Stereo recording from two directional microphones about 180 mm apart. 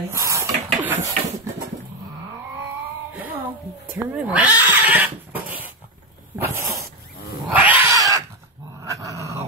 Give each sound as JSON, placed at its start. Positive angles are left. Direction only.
{"t": 0.1, "sound": "a sound", "side_deg": -15}
{"t": 3.9, "sound": "speech", "side_deg": -5}
{"t": 6.3, "sound": "dog", "side_deg": -10}
{"t": 7.4, "sound": "cat", "side_deg": -10}
{"t": 8.8, "sound": "dog", "side_deg": -15}